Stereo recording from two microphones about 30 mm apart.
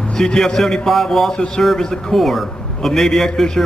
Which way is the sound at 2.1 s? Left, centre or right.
Centre.